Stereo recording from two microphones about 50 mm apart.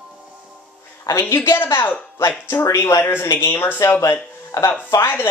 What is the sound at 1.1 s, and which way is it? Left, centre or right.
Speech, left.